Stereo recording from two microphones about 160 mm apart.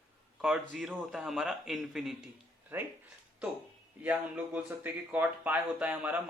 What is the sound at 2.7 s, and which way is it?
Speech, 15° right (ahead or behind).